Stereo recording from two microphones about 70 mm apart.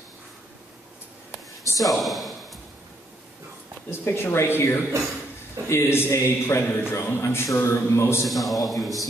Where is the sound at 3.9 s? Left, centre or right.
Left.